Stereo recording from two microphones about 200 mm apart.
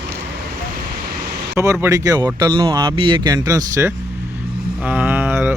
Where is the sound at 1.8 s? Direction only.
15° right (ahead or behind).